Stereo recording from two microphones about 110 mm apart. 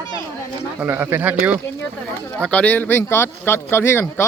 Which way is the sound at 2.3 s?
10° left (ahead or behind).